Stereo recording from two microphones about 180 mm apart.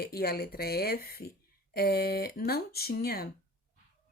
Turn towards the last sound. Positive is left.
turn(degrees=60)  # may be behind; listen again after turning